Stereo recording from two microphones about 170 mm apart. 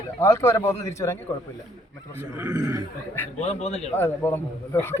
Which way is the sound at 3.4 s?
40° left (ahead or behind).